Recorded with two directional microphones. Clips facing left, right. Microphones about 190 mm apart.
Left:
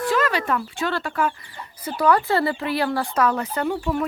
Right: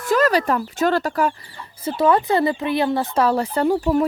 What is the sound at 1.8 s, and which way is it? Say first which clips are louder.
Speech: right 2 dB; 25° right (ahead or behind).